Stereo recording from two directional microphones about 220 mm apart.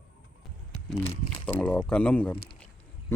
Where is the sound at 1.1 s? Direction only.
20° left (ahead or behind).